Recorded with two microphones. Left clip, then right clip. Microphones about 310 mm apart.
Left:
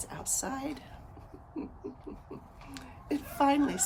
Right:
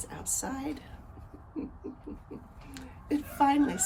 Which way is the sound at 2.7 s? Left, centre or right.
Centre.